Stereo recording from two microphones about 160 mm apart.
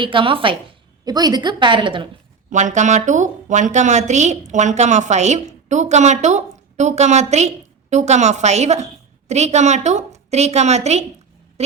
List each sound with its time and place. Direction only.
0.0 s a woman's voice: 30° right (ahead or behind)
2.5 s a woman's voice: 50° right (ahead or behind)